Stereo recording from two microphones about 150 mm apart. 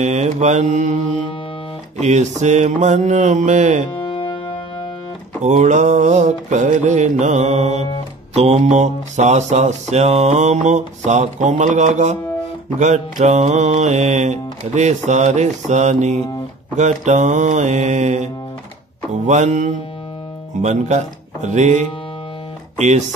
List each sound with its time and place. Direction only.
0.0 s music: 50° right (ahead or behind)
4.0 s music: 30° left (ahead or behind)
5.4 s music: 50° right (ahead or behind)